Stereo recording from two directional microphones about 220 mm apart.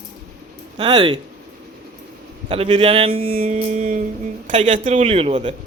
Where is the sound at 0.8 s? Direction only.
20° right (ahead or behind).